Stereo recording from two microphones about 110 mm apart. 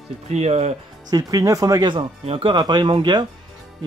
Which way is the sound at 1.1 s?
35° right (ahead or behind).